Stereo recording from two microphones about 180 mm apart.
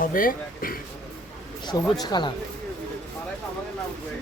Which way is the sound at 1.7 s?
20° left (ahead or behind).